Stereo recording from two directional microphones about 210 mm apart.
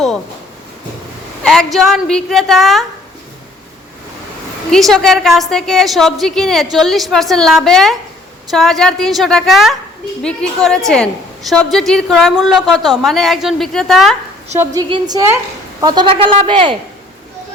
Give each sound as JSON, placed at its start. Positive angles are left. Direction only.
{"t": 1.5, "sound": "a woman's voice", "side_deg": 0}
{"t": 4.7, "sound": "a woman's voice", "side_deg": 0}
{"t": 14.6, "sound": "a woman's voice", "side_deg": -15}